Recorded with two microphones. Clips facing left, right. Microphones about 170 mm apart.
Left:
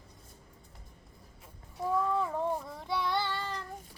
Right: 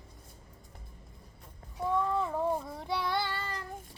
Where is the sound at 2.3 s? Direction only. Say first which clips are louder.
Right 2 dB; 10° right (ahead or behind).